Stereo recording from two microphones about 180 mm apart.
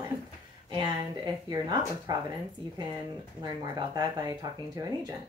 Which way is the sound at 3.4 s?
20° right (ahead or behind).